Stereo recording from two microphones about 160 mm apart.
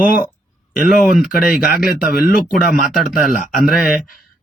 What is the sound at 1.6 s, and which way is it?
Speech, 70° left (ahead or behind).